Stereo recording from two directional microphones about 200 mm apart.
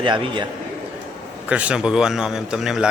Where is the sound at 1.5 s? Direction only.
5° right (ahead or behind).